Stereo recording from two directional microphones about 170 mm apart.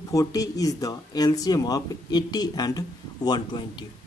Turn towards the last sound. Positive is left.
turn(degrees=25)  # may be behind; listen again after turning